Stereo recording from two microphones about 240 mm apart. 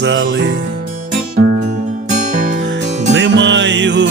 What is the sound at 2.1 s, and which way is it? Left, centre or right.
Music, right.